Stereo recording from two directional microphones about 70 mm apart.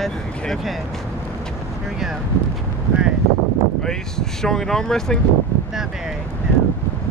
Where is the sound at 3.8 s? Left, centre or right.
Centre.